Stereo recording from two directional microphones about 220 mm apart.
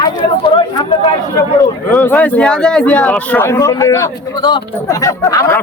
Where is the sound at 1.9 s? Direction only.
10° left (ahead or behind).